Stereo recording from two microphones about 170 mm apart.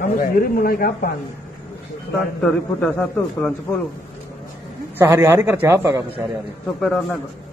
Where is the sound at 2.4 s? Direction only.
5° left (ahead or behind).